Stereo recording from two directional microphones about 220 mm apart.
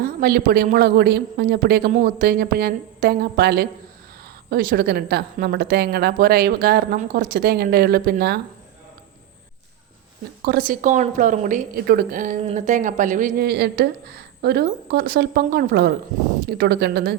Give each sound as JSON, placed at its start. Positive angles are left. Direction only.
{"t": 0.0, "sound": "a woman's voice", "side_deg": -40}
{"t": 10.4, "sound": "a woman's voice", "side_deg": -45}